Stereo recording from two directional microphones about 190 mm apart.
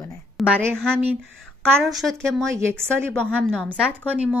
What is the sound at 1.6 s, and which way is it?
A woman's voice, centre (ahead or behind).